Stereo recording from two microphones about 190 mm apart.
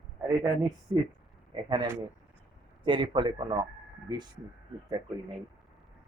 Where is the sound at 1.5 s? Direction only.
20° right (ahead or behind).